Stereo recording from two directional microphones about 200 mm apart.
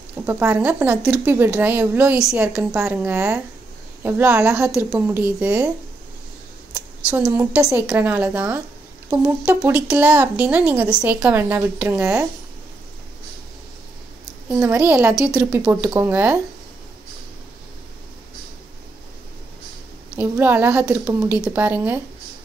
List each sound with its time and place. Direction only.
0.3 s speech: 10° right (ahead or behind)
7.1 s speech: 10° right (ahead or behind)
14.5 s speech: 10° right (ahead or behind)
20.1 s speech: 10° right (ahead or behind)